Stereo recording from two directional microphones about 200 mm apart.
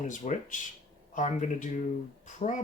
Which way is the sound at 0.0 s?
40° left (ahead or behind).